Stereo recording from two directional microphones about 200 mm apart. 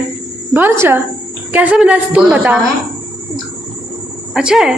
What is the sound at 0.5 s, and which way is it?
Speech, 10° right (ahead or behind).